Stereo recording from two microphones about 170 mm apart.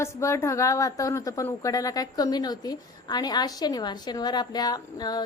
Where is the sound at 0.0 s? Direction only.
15° left (ahead or behind).